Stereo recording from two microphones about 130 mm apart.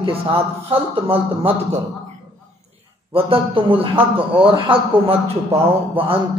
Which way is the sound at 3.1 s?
45° right (ahead or behind).